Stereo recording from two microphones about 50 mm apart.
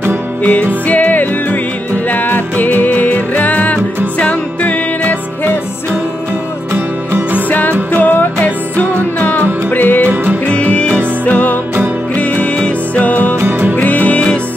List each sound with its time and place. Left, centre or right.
0.4 s music: left
6.7 s music: right
7.4 s music: left
10.4 s music: left